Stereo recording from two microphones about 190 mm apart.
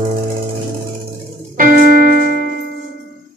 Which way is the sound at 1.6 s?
45° right (ahead or behind).